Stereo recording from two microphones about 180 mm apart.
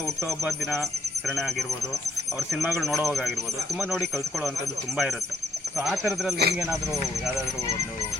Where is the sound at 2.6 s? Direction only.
Centre (ahead or behind).